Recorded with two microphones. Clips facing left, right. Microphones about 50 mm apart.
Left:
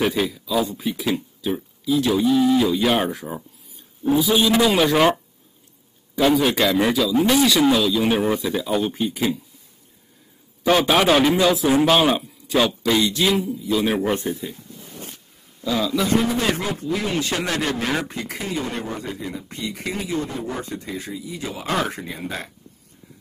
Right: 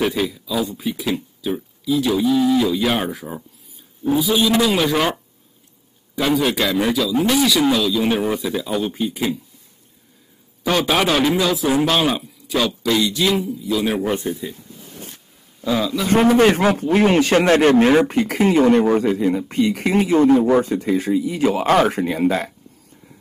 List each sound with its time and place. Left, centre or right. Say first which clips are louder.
0.0 s a man's voice: right 1 dB; centre
6.1 s a man's voice: left 1 dB; centre
10.7 s a man's voice: left 1 dB; centre
15.6 s speech: right 2 dB; right
16.1 s a man's voice: right 12 dB; right
18.0 s a man's voice: right 12 dB; right
20.7 s a man's voice: right 12 dB; right
21.8 s a man's voice: right 11 dB; right